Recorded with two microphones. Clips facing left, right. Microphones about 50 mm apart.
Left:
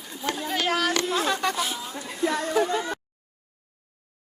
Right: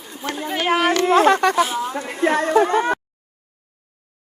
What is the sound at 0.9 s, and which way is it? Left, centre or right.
Speech, right.